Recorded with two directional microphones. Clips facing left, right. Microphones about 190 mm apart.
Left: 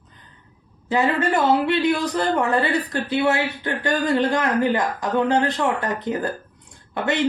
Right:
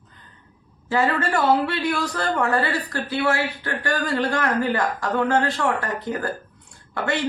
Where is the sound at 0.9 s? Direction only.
20° left (ahead or behind).